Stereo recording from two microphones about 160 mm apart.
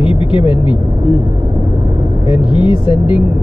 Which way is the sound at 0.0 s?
35° left (ahead or behind).